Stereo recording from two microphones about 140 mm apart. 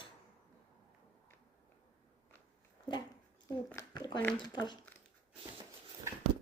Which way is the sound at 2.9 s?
35° left (ahead or behind).